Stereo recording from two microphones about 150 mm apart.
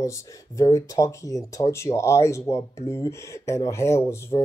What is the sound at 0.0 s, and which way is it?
Speech, 20° left (ahead or behind).